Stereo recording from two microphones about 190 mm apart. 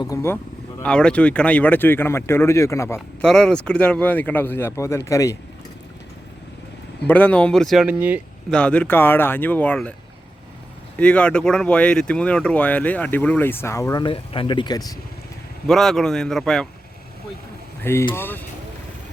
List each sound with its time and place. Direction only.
0.0 s speech: 15° left (ahead or behind)
0.8 s speech: 5° left (ahead or behind)
3.2 s speech: 5° left (ahead or behind)
7.1 s speech: 5° left (ahead or behind); by 8.2 s 10° right (ahead or behind)
8.4 s speech: 5° left (ahead or behind)
10.9 s speech: 5° left (ahead or behind)
15.6 s speech: centre (ahead or behind)
18.1 s speech: 10° left (ahead or behind)